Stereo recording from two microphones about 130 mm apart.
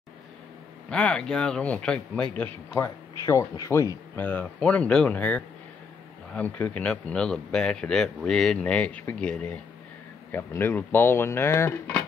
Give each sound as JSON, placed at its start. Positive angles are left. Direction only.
{"t": 0.8, "sound": "speech", "side_deg": 5}
{"t": 2.7, "sound": "speech", "side_deg": 20}
{"t": 4.2, "sound": "speech", "side_deg": 10}